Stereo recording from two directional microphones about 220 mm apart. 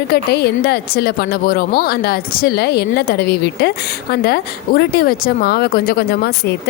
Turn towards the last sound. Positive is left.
turn(degrees=45)  # may be behind; listen again after turning